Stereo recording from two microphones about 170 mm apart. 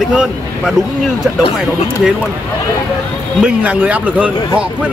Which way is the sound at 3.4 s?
10° right (ahead or behind).